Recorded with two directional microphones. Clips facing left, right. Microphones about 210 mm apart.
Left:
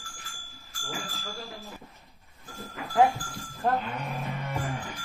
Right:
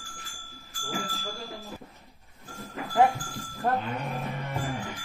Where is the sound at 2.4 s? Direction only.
Centre (ahead or behind).